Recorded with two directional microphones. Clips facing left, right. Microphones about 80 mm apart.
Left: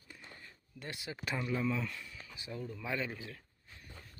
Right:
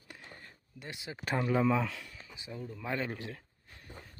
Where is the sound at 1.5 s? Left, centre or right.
Right.